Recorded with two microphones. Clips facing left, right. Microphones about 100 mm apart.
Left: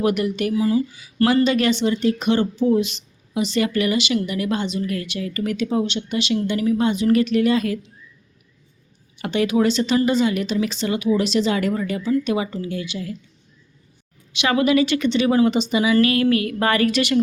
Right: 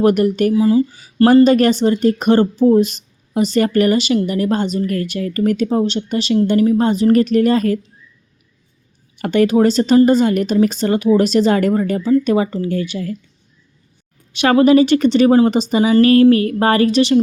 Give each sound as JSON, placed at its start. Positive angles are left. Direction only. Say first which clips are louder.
{"t": 0.0, "sound": "speech", "louder": "right 7 dB", "side_deg": -45}
{"t": 9.1, "sound": "speech", "louder": "right 6 dB", "side_deg": -45}
{"t": 14.3, "sound": "a woman's voice", "louder": "right 7 dB", "side_deg": -45}